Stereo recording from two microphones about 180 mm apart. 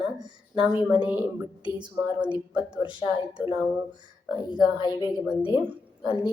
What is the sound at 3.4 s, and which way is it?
Speech, 5° right (ahead or behind).